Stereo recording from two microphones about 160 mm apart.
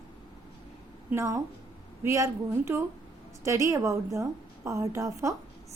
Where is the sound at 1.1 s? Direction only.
20° right (ahead or behind).